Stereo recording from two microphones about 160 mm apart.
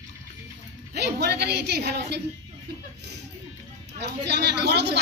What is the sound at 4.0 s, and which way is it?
A woman's voice, 90° right.